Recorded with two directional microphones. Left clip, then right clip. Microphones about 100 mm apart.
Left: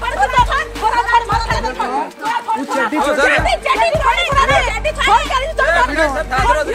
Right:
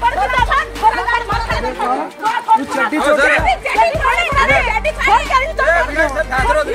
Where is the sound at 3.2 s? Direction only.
25° left (ahead or behind).